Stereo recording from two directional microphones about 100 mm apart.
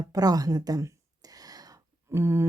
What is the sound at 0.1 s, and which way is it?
Speech, 40° right (ahead or behind).